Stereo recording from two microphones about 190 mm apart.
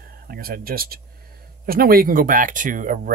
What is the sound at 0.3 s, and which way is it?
Speech, 50° right (ahead or behind).